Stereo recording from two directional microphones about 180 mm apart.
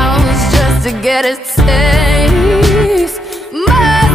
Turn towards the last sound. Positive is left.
turn(degrees=0)  # may be behind; listen again after turning